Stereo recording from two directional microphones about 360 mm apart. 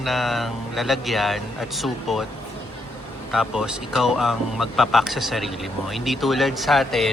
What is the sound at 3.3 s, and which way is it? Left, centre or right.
Speech, centre.